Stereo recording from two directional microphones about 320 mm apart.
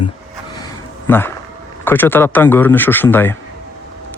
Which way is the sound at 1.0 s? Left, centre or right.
Centre.